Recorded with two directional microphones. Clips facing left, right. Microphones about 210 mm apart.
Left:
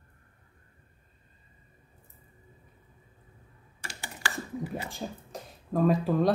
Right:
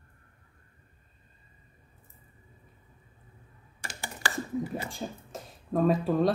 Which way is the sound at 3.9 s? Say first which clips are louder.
Right 2 dB; 45° right (ahead or behind).